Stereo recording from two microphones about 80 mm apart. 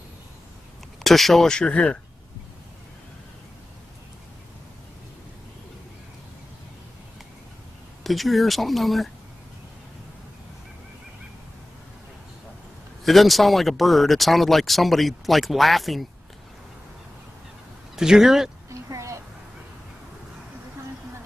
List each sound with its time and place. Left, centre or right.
1.0 s speech: centre
8.0 s speech: centre
13.0 s speech: centre
17.9 s speech: centre
18.7 s a sound: right